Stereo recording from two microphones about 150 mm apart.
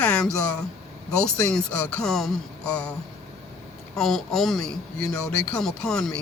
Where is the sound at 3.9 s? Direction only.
5° left (ahead or behind).